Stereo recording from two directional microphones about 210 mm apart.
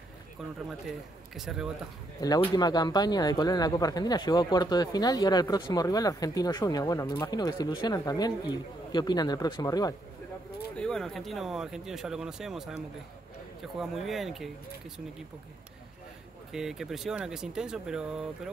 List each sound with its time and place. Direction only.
1.3 s speech: centre (ahead or behind)
2.1 s speech: 20° left (ahead or behind)
10.8 s speech: 5° left (ahead or behind)
16.5 s speech: centre (ahead or behind)